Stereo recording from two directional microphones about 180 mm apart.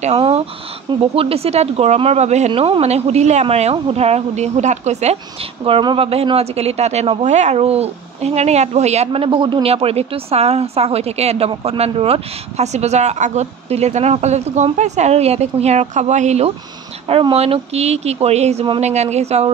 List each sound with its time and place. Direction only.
0.0 s speech: 35° right (ahead or behind)
5.7 s speech: 30° right (ahead or behind)